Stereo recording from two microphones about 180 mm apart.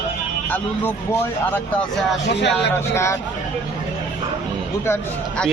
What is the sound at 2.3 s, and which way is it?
Speech, 70° left (ahead or behind).